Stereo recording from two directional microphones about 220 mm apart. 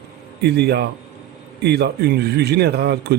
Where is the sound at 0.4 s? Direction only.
50° right (ahead or behind).